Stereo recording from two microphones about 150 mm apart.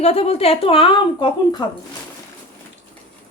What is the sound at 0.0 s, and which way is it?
Speech, 45° left (ahead or behind).